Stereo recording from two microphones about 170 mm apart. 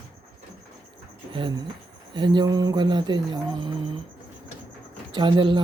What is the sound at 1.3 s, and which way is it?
Speech, 30° right (ahead or behind).